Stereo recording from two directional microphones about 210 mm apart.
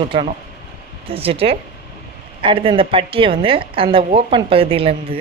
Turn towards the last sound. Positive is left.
turn(degrees=-25)  # may be behind; listen again after turning